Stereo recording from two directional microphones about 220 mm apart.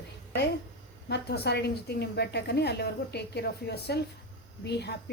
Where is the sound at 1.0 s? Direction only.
50° left (ahead or behind).